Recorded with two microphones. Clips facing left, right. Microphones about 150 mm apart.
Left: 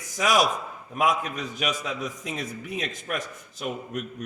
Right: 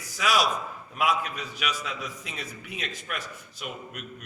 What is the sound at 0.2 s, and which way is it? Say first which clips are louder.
A man's voice: left 3 dB; 45° left (ahead or behind).